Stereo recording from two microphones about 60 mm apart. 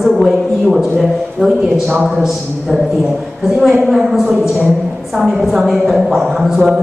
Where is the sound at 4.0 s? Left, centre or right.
Centre.